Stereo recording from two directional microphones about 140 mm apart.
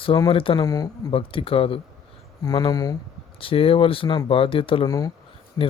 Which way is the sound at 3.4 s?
40° left (ahead or behind).